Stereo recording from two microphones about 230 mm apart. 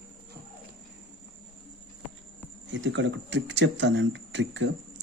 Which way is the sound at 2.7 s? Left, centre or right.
Right.